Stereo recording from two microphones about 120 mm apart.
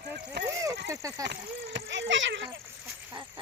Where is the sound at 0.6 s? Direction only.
25° right (ahead or behind).